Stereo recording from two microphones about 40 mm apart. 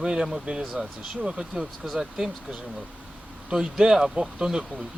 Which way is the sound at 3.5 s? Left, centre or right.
Centre.